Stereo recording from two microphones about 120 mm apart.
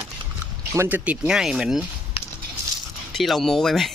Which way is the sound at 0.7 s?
20° right (ahead or behind).